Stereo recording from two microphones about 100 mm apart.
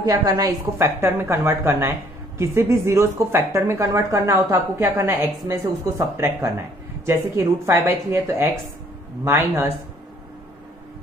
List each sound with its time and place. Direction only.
0.0 s speech: 35° right (ahead or behind)